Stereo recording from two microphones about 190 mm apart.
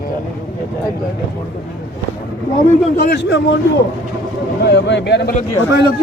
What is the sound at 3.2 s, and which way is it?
Speech, 65° left (ahead or behind).